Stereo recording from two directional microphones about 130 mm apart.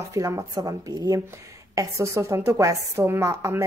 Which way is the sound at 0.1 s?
25° right (ahead or behind).